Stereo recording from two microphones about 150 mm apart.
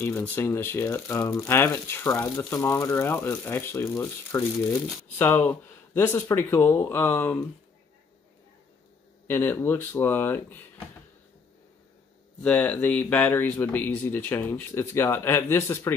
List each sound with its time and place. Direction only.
0.0 s speech: 10° left (ahead or behind)
4.7 s speech: 5° left (ahead or behind)
5.3 s speech: 15° left (ahead or behind)
9.3 s speech: 15° left (ahead or behind)
12.4 s speech: 10° left (ahead or behind)